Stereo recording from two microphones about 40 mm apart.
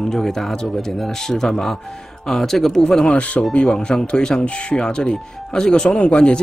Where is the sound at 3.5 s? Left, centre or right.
Left.